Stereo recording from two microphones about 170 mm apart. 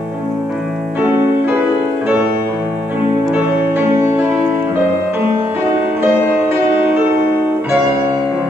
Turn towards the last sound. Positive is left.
turn(degrees=-10)  # may be behind; listen again after turning